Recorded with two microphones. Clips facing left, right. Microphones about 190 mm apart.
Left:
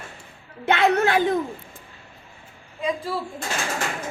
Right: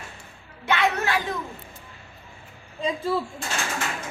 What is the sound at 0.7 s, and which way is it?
Speech, 55° left (ahead or behind).